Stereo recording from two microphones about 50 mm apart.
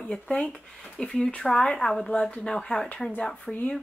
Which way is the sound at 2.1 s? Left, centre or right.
Left.